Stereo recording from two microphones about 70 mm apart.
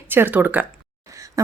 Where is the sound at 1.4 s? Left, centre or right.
Right.